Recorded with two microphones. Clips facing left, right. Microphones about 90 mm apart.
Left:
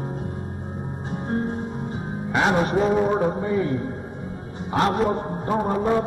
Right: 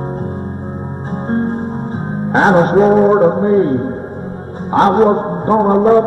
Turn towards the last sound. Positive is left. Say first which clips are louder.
# right 12 dB
turn(degrees=-40)  # may be behind; listen again after turning